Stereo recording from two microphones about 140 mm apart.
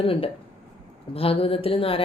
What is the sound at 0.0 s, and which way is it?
A woman's voice, 40° left (ahead or behind).